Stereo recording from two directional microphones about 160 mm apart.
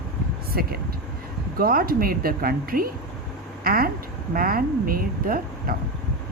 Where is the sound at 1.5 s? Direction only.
65° right (ahead or behind).